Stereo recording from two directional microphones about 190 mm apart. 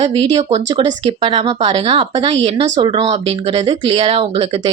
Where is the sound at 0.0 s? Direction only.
30° right (ahead or behind).